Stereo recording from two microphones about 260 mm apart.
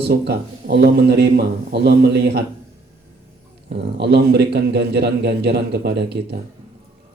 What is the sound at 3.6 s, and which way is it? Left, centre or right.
A man's voice, right.